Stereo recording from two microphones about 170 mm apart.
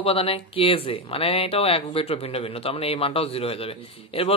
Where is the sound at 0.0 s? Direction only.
35° left (ahead or behind).